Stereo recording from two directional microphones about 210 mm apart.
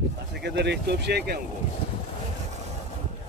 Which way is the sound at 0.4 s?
55° right (ahead or behind).